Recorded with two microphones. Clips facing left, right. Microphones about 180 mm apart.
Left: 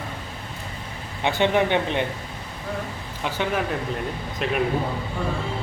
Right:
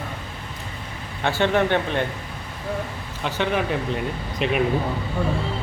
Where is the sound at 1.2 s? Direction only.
15° left (ahead or behind).